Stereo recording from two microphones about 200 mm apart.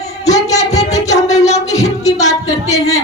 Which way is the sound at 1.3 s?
35° left (ahead or behind).